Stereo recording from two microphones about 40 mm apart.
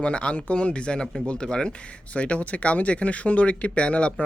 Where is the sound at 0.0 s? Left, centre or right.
Left.